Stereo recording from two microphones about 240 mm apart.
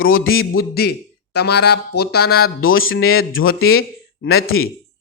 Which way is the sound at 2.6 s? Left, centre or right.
Left.